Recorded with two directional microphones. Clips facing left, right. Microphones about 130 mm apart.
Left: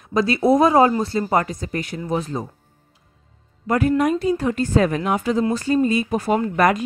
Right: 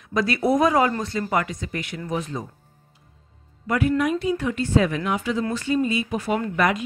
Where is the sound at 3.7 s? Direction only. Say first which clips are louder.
Left 3 dB; 40° left (ahead or behind).